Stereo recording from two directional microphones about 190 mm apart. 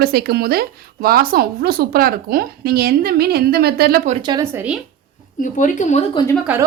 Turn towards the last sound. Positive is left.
turn(degrees=-5)  # may be behind; listen again after turning